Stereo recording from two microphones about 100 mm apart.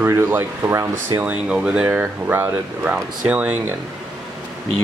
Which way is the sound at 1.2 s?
10° right (ahead or behind).